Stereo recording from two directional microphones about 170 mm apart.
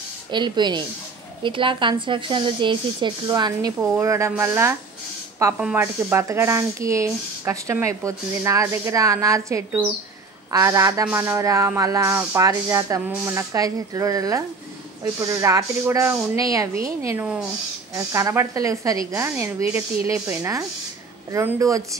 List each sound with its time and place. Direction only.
0.3 s a man's voice: 25° right (ahead or behind)